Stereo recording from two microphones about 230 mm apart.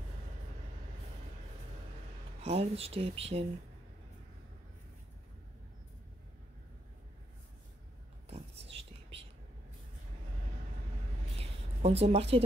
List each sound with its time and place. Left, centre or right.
2.4 s speech: right
8.3 s whispering: right
11.3 s a sound: right